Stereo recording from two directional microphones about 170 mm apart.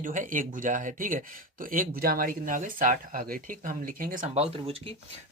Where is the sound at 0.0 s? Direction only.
50° right (ahead or behind).